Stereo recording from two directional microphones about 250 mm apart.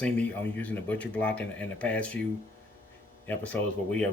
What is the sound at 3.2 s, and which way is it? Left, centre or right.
Speech, centre.